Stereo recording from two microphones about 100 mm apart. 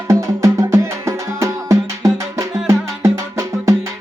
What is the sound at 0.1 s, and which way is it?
Music, 30° right (ahead or behind).